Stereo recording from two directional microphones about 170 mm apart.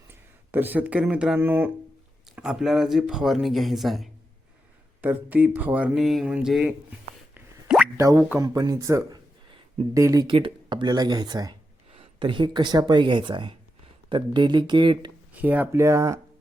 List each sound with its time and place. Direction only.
0.1 s speech: 10° right (ahead or behind)
7.3 s plop: 5° right (ahead or behind)
7.9 s a man's voice: 20° right (ahead or behind)
15.3 s speech: 10° right (ahead or behind)